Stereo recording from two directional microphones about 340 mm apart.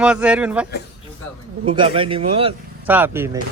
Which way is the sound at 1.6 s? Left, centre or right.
Centre.